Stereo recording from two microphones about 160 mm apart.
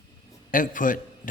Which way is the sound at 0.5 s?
55° left (ahead or behind).